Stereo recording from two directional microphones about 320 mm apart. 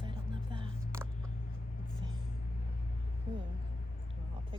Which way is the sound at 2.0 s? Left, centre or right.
Centre.